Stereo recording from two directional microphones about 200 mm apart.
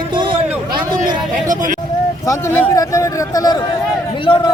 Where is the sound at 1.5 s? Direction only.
40° right (ahead or behind).